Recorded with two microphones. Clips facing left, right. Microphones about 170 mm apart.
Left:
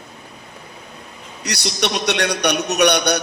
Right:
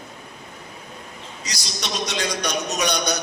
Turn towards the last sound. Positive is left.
turn(degrees=65)  # may be behind; listen again after turning